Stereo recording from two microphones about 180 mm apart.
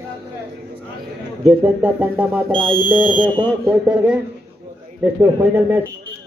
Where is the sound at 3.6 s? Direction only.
10° right (ahead or behind).